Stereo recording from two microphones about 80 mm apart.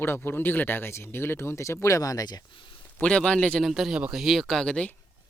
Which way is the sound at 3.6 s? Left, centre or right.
Centre.